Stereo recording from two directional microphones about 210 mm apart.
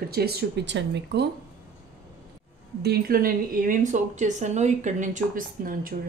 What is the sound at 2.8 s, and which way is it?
Speech, 45° right (ahead or behind).